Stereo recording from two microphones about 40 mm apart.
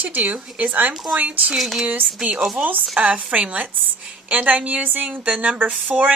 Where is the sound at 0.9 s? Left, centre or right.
Centre.